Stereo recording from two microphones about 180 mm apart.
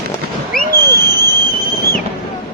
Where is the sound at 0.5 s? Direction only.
55° left (ahead or behind).